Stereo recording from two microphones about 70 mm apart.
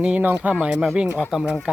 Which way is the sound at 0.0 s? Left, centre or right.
Right.